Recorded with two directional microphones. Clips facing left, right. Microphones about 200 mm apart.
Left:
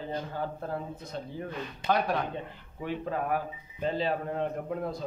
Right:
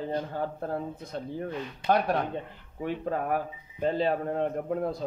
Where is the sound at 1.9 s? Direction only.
50° right (ahead or behind).